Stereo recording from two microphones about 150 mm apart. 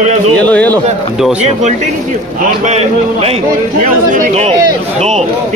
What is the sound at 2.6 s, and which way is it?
Speech, 45° right (ahead or behind).